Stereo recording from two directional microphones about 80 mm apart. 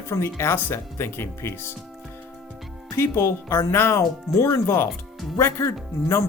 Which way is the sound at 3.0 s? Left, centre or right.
Left.